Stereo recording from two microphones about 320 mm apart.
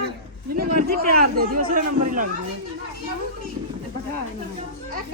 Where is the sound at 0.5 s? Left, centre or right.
Right.